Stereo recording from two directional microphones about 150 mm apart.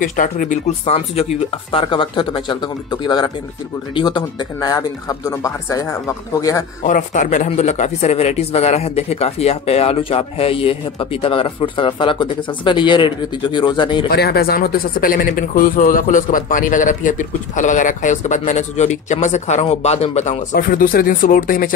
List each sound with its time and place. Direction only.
0.0 s speech: 60° left (ahead or behind)
0.8 s a man's voice: 45° left (ahead or behind); by 6.6 s 20° left (ahead or behind)
6.8 s speech: 60° left (ahead or behind); by 14.0 s 30° left (ahead or behind)
14.1 s speech: 90° left; by 20.3 s 45° left (ahead or behind)
20.5 s speech: 70° left (ahead or behind)